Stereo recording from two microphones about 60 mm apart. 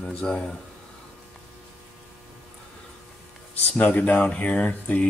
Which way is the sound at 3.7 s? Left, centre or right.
Left.